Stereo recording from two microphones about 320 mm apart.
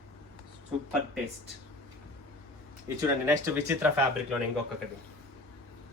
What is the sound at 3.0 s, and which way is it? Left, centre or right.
Speech, centre.